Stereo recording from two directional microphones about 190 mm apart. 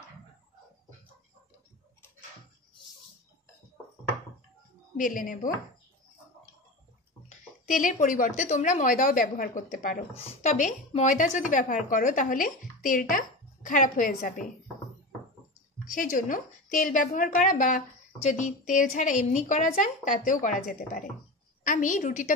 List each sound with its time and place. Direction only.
4.9 s a woman's voice: 45° left (ahead or behind)
7.2 s a woman's voice: 45° left (ahead or behind)
15.9 s a woman's voice: 45° left (ahead or behind)